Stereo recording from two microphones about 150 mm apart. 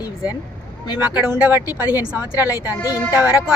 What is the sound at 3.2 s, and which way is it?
Speech, 10° right (ahead or behind).